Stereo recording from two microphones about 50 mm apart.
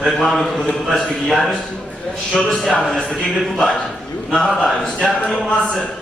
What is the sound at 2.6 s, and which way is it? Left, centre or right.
A man's voice, centre.